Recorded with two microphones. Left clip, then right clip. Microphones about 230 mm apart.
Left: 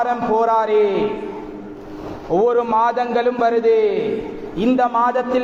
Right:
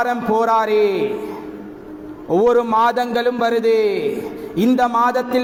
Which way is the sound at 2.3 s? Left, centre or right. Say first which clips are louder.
Right 1 dB; right.